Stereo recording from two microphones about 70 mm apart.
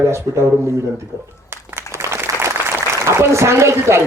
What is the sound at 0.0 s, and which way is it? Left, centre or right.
Speech, right.